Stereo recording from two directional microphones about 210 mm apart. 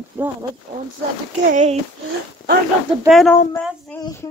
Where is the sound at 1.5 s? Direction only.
35° right (ahead or behind).